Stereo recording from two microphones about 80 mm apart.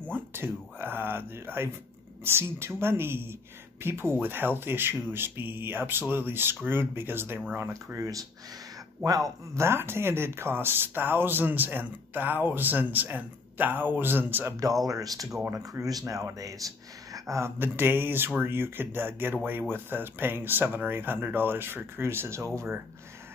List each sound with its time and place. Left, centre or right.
0.1 s speech: right
14.9 s speech: right
17.6 s speech: right